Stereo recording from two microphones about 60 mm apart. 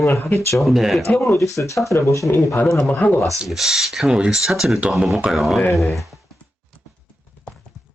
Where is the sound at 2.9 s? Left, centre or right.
Left.